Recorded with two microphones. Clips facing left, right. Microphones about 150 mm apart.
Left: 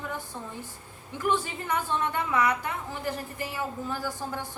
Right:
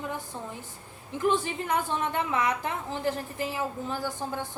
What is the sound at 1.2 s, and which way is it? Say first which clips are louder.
A woman's voice: right 2 dB; 20° right (ahead or behind).